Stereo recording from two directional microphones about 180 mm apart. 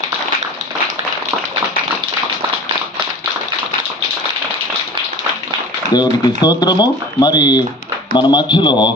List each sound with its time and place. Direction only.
5.9 s speech: 20° left (ahead or behind)